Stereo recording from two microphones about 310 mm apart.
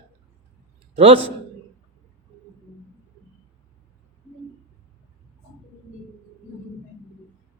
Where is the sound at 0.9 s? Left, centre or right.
Centre.